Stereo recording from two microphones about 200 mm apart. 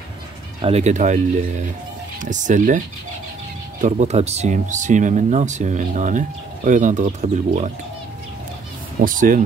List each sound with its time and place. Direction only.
0.6 s speech: 30° right (ahead or behind)
3.8 s speech: 35° right (ahead or behind)
9.0 s speech: 40° right (ahead or behind)